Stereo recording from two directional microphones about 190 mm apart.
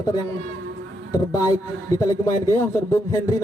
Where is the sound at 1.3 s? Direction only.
20° left (ahead or behind).